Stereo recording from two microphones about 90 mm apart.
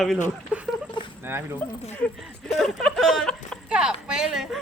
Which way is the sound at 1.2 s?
25° right (ahead or behind).